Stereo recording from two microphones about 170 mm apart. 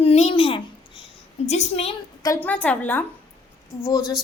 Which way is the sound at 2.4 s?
10° left (ahead or behind).